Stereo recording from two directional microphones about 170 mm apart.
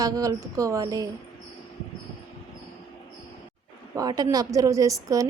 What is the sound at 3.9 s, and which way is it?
A woman's voice, 20° right (ahead or behind).